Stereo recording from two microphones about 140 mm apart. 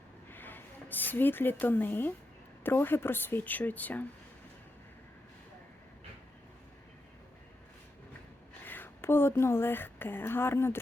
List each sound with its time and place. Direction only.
0.3 s speech: 15° left (ahead or behind)
8.6 s speech: 15° left (ahead or behind)